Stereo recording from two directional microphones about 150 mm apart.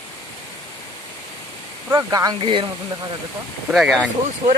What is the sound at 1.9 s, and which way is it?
Speech, 25° right (ahead or behind).